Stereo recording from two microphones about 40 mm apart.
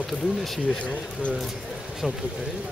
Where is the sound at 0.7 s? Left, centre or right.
Left.